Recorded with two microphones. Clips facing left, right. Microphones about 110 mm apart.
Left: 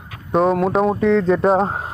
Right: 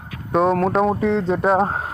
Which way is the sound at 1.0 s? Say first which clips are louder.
Left 4 dB; 35° right (ahead or behind).